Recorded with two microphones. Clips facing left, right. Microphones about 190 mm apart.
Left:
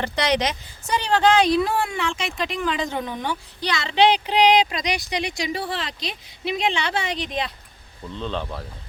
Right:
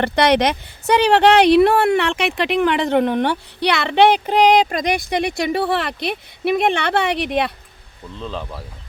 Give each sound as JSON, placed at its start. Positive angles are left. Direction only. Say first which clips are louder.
{"t": 0.0, "sound": "speech", "louder": "right 7 dB", "side_deg": -60}
{"t": 8.1, "sound": "speech", "louder": "left 1 dB", "side_deg": 0}